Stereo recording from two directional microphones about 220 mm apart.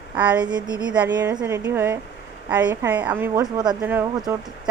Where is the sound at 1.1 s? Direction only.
20° right (ahead or behind).